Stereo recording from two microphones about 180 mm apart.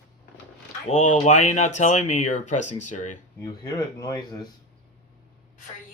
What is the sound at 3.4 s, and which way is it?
Speech, 20° left (ahead or behind).